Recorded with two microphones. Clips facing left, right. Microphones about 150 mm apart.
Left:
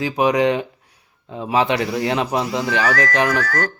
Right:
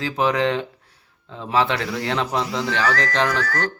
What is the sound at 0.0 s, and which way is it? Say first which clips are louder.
Speech: left 4 dB; 15° left (ahead or behind).